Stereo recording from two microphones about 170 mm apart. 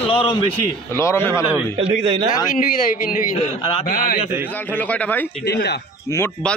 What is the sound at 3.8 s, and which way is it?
Speech, 55° left (ahead or behind).